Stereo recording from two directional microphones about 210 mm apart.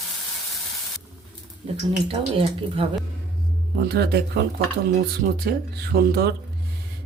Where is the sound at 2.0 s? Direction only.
25° right (ahead or behind).